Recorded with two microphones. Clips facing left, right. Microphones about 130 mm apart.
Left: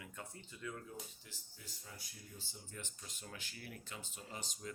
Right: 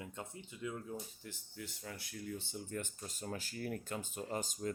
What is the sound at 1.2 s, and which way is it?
Speech, 60° right (ahead or behind).